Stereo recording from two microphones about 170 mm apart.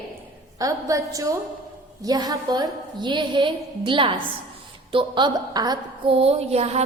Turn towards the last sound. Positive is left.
turn(degrees=-40)  # may be behind; listen again after turning